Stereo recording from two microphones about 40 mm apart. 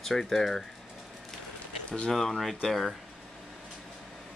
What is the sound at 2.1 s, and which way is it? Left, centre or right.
Speech, centre.